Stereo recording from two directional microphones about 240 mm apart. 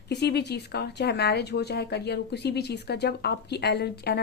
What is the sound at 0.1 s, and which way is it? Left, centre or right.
Speech, left.